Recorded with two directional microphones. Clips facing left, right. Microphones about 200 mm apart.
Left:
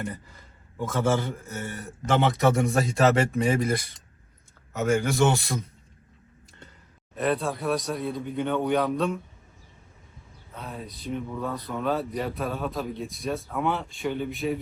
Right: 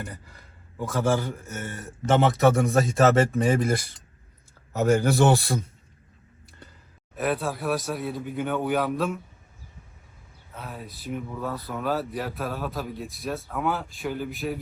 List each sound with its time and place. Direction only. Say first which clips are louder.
0.8 s speech: even; centre (ahead or behind)
4.7 s speech: right 3 dB; 35° right (ahead or behind)
7.2 s speech: left 1 dB; 5° right (ahead or behind)
10.5 s speech: left 1 dB; 5° right (ahead or behind)